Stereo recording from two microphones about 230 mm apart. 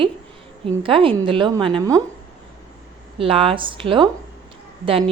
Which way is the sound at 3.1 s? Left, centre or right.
Right.